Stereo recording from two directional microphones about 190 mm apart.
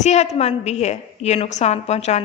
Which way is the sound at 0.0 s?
35° left (ahead or behind).